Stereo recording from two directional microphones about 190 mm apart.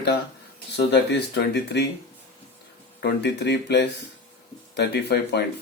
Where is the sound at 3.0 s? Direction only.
60° left (ahead or behind).